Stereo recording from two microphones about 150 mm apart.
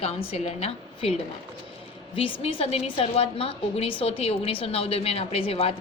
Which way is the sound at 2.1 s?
35° left (ahead or behind).